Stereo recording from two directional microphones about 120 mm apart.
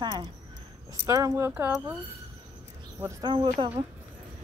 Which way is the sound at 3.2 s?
40° right (ahead or behind).